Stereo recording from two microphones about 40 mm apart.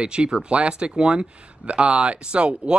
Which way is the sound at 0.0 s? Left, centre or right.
Right.